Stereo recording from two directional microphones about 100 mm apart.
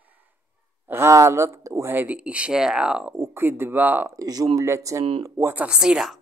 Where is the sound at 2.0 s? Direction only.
10° right (ahead or behind).